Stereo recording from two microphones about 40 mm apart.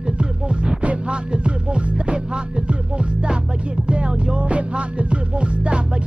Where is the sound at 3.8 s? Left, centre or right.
Right.